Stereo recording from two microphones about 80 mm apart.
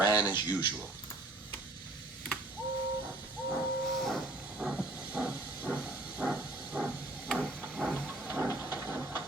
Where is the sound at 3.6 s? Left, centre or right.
Centre.